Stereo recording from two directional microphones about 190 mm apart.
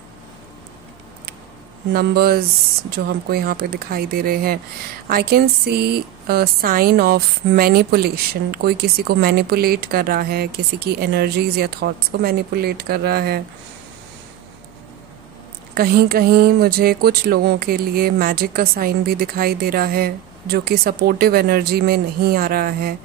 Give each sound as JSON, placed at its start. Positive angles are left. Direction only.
{"t": 2.0, "sound": "speech", "side_deg": -55}
{"t": 15.7, "sound": "speech", "side_deg": -55}